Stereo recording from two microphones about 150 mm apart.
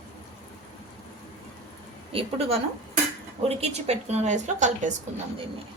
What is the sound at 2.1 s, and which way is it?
A woman's voice, 40° right (ahead or behind).